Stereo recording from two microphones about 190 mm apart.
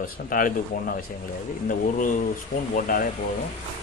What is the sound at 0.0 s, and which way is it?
Speech, 50° left (ahead or behind).